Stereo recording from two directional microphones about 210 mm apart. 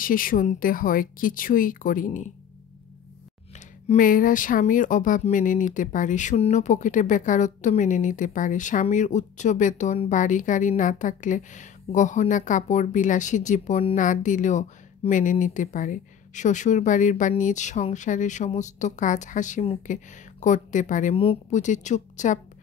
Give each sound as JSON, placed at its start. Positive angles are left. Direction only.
{"t": 0.0, "sound": "speech", "side_deg": 40}
{"t": 3.5, "sound": "speech", "side_deg": 40}